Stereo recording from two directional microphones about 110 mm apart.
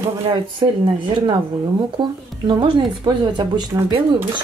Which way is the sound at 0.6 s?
45° right (ahead or behind).